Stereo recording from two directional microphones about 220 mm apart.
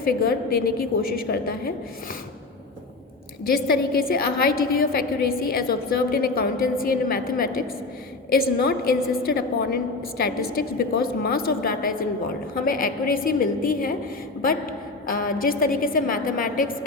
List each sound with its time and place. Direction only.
0.0 s a woman's voice: 40° left (ahead or behind)
3.4 s a woman's voice: 45° left (ahead or behind)